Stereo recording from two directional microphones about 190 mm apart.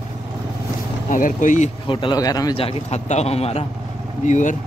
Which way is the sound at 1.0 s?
45° left (ahead or behind).